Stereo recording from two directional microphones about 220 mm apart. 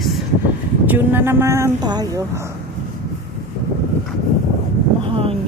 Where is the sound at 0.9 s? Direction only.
10° right (ahead or behind).